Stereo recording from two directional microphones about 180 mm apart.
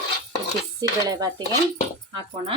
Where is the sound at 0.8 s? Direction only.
20° right (ahead or behind).